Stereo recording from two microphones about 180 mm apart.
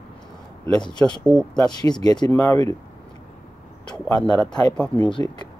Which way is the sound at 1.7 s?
25° left (ahead or behind).